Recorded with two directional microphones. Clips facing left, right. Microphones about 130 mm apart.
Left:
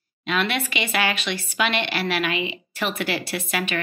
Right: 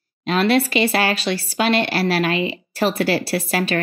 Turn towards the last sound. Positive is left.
turn(degrees=-35)  # may be behind; listen again after turning